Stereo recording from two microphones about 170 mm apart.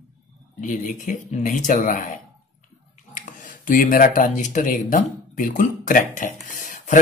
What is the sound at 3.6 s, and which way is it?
Speech, 50° left (ahead or behind).